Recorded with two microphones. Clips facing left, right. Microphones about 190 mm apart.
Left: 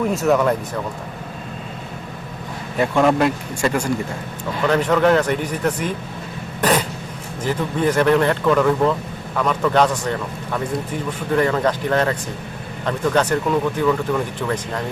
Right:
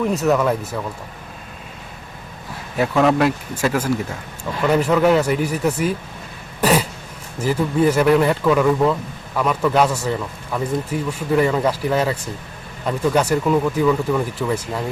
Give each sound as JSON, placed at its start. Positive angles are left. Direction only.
{"t": 0.1, "sound": "speech", "side_deg": 0}
{"t": 2.7, "sound": "speech", "side_deg": 0}
{"t": 6.6, "sound": "throat clearing", "side_deg": -10}
{"t": 7.4, "sound": "speech", "side_deg": -5}